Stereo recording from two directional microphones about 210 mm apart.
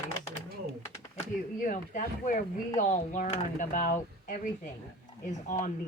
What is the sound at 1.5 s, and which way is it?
Speech, 40° left (ahead or behind).